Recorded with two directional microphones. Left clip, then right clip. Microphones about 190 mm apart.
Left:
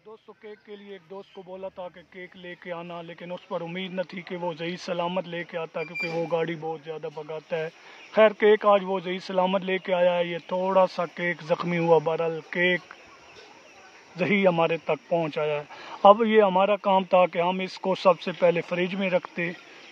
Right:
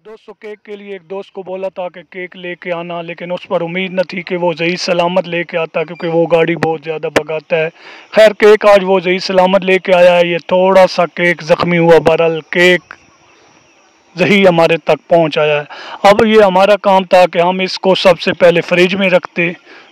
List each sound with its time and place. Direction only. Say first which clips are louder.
0.4 s speech: right 17 dB; 55° right (ahead or behind)
14.1 s speech: right 13 dB; 55° right (ahead or behind)